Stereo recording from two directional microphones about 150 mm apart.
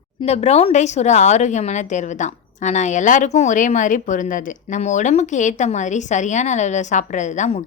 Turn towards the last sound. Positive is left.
turn(degrees=50)  # may be behind; listen again after turning